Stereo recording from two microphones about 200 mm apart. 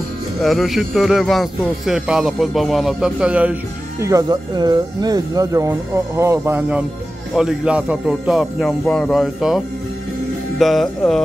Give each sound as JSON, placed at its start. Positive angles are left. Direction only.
{"t": 0.4, "sound": "speech", "side_deg": 0}
{"t": 4.0, "sound": "speech", "side_deg": -15}
{"t": 10.6, "sound": "speech", "side_deg": 0}